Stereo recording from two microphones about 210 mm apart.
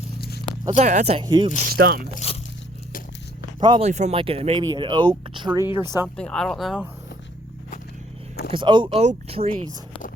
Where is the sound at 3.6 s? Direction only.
20° right (ahead or behind).